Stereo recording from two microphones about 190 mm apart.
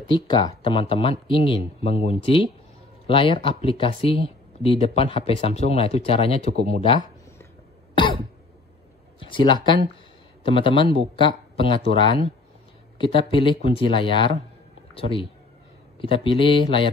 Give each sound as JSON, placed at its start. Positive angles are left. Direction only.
{"t": 0.1, "sound": "speech", "side_deg": 25}
{"t": 9.2, "sound": "speech", "side_deg": 25}